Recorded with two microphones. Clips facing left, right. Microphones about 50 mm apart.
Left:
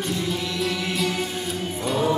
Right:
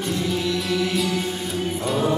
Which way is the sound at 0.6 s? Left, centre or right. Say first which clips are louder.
Right 2 dB; centre.